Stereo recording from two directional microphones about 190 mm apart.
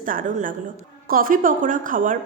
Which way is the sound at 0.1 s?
45° right (ahead or behind).